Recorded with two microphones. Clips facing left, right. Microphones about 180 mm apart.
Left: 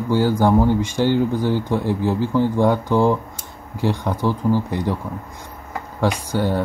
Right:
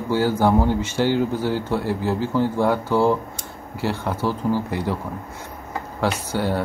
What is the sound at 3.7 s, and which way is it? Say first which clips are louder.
Speech: left 3 dB; 15° left (ahead or behind).